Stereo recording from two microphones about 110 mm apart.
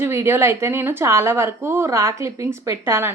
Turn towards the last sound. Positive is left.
turn(degrees=-20)  # may be behind; listen again after turning